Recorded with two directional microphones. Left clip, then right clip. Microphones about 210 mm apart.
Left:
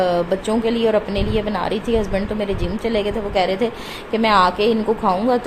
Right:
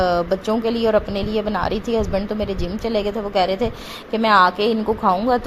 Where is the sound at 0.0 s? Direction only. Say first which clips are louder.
Even; 20° right (ahead or behind).